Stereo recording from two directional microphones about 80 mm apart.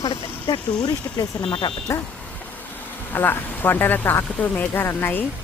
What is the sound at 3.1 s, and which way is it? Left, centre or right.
Speech, left.